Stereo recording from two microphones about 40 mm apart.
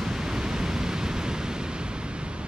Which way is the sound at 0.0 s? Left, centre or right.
Centre.